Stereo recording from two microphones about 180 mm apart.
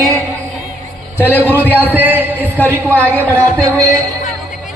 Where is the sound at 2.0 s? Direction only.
10° right (ahead or behind).